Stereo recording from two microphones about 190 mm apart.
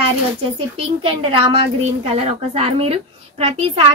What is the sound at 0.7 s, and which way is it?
A woman's voice, 30° right (ahead or behind).